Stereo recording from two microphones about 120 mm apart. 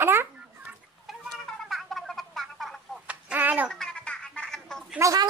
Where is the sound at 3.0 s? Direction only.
15° right (ahead or behind).